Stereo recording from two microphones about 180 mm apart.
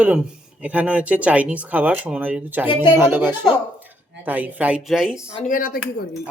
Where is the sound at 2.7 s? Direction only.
25° left (ahead or behind).